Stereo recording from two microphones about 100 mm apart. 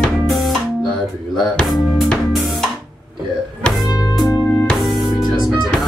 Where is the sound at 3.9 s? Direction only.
40° left (ahead or behind).